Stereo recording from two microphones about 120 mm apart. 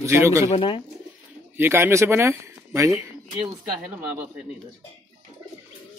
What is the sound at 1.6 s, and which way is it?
Speech, 20° right (ahead or behind).